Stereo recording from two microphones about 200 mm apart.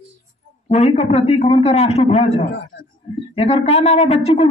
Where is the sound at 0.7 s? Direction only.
35° left (ahead or behind).